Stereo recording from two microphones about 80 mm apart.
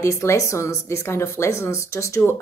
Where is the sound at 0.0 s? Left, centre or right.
Left.